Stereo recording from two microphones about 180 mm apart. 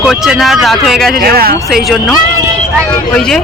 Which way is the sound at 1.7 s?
Centre (ahead or behind).